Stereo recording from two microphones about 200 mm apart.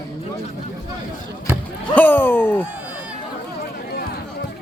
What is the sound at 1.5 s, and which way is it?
Rowboat, 10° right (ahead or behind).